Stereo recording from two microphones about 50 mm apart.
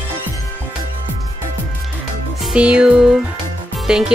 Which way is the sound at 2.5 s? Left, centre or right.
Right.